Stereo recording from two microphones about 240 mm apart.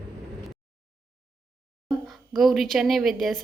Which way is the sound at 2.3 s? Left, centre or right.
Centre.